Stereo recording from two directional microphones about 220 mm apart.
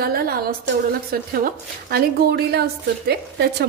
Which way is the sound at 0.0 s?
45° right (ahead or behind).